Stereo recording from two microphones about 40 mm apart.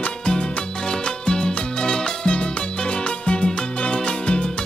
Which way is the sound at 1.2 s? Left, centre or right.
Left.